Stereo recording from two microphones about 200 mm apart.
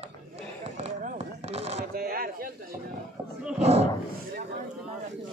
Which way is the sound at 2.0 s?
50° right (ahead or behind).